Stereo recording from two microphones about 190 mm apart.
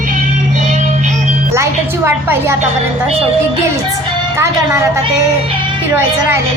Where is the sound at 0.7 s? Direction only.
40° right (ahead or behind).